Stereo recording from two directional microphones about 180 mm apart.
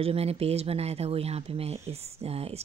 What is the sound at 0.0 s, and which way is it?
Speech, 35° right (ahead or behind).